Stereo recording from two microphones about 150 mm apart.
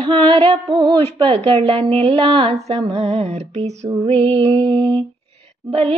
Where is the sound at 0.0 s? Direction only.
30° right (ahead or behind).